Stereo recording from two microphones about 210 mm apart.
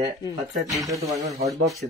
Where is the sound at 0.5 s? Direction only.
Centre (ahead or behind).